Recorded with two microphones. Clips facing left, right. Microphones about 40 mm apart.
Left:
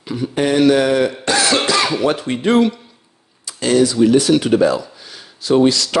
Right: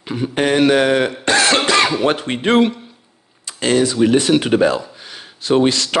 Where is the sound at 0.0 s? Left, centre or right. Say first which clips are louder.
Even; right.